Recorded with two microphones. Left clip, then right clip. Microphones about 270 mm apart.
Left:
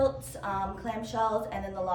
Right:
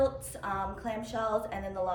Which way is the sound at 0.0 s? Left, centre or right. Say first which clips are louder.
Left 2 dB; centre.